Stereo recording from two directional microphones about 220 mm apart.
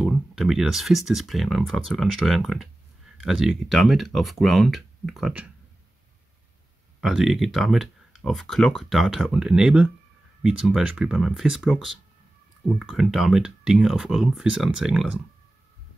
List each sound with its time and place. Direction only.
0.0 s speech: centre (ahead or behind)
7.0 s speech: centre (ahead or behind)